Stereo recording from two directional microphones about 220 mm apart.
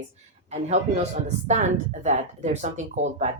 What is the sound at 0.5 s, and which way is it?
Speech, 30° right (ahead or behind).